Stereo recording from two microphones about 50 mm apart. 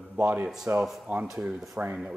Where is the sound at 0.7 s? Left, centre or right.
Right.